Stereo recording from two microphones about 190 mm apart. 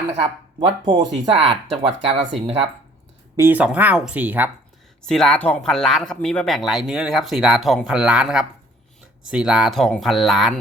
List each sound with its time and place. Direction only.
0.6 s speech: 20° right (ahead or behind)
1.3 s speech: 30° right (ahead or behind)
3.3 s speech: 10° right (ahead or behind)
5.0 s speech: 5° left (ahead or behind)